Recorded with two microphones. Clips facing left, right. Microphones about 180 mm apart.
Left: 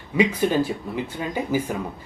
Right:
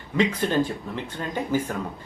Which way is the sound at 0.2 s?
10° left (ahead or behind).